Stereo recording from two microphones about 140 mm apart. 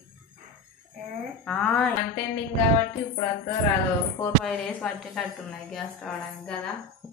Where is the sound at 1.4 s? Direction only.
5° left (ahead or behind).